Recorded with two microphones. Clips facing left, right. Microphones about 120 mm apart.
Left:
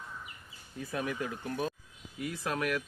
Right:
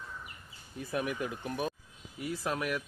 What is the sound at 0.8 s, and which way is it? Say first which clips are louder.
Speech: right 1 dB; 20° right (ahead or behind).